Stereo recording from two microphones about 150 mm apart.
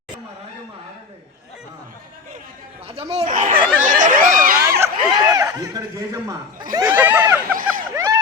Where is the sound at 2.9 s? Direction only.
40° right (ahead or behind).